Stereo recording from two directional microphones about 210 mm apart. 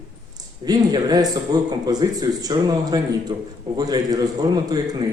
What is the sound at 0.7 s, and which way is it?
A man's voice, 20° right (ahead or behind).